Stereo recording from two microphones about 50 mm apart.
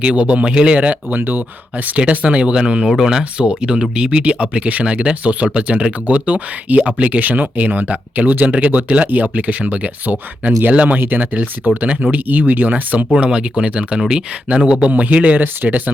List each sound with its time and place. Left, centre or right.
0.0 s speech: right
1.2 s speech: right
2.0 s speech: right
11.0 s speech: right
13.1 s speech: right
14.8 s speech: right